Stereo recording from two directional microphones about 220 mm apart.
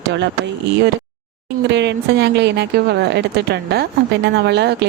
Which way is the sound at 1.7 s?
50° right (ahead or behind).